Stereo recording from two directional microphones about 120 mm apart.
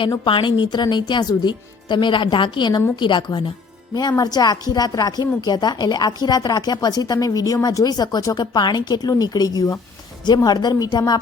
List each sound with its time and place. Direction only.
0.3 s a woman's voice: 40° left (ahead or behind)